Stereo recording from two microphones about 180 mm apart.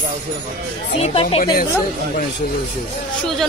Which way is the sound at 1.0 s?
35° left (ahead or behind).